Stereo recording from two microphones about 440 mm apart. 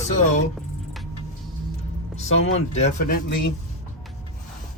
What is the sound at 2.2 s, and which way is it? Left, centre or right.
Speech, centre.